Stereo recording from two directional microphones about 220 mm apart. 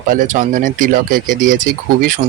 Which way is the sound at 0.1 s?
35° right (ahead or behind).